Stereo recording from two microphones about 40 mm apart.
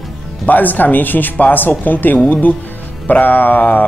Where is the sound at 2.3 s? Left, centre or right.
Left.